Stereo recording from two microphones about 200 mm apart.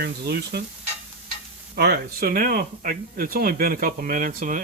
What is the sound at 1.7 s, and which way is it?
Speech, 50° right (ahead or behind).